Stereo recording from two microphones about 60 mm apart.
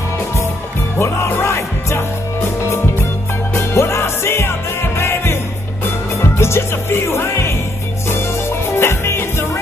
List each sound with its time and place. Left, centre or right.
0.9 s music: left